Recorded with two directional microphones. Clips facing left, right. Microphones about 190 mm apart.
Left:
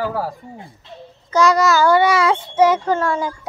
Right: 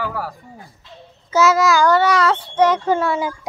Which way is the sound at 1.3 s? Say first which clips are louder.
Even; 5° right (ahead or behind).